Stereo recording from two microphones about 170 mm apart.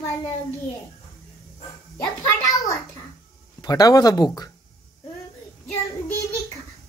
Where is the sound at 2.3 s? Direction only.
20° left (ahead or behind).